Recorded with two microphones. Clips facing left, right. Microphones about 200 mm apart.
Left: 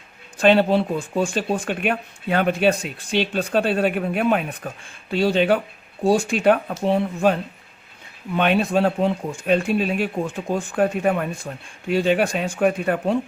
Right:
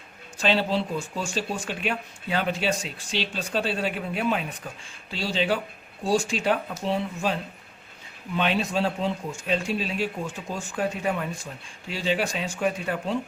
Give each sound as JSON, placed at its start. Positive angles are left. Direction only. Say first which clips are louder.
{"t": 0.3, "sound": "speech", "louder": "left 8 dB", "side_deg": 55}
{"t": 8.4, "sound": "speech", "louder": "left 6 dB", "side_deg": 55}